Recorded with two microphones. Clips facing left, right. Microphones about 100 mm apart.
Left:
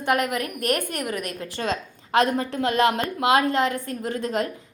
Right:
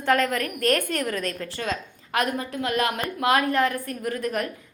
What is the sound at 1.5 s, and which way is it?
A woman's voice, 25° left (ahead or behind).